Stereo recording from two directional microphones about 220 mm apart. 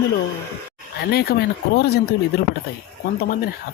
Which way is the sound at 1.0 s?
45° left (ahead or behind).